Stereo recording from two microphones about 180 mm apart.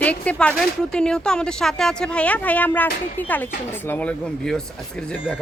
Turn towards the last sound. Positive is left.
turn(degrees=5)  # may be behind; listen again after turning